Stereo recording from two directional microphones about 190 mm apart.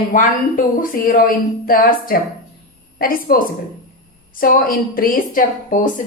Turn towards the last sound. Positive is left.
turn(degrees=45)  # may be behind; listen again after turning